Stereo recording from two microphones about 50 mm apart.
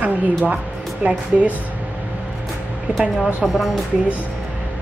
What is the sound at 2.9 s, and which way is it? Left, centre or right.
Speech, right.